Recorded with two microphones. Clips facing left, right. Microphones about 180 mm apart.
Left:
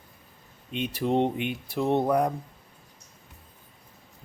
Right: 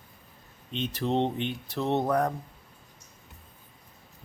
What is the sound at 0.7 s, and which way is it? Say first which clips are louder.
Speech: left 2 dB; 10° left (ahead or behind).